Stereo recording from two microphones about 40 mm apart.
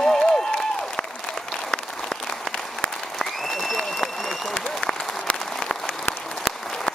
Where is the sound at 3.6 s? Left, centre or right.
Centre.